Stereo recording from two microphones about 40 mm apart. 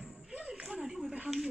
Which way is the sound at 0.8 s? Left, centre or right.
Centre.